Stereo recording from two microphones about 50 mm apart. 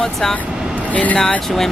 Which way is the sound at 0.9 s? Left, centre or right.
Left.